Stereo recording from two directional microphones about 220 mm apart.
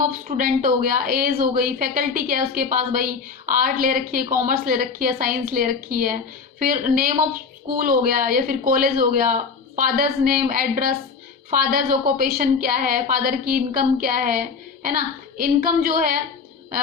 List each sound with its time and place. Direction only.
0.0 s a woman's voice: 40° right (ahead or behind)